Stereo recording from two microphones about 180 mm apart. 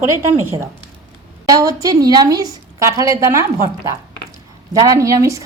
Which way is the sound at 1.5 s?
20° right (ahead or behind).